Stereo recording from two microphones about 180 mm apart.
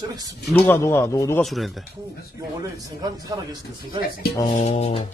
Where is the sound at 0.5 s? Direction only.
15° left (ahead or behind).